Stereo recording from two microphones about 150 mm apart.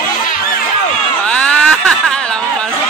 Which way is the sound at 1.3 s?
5° left (ahead or behind).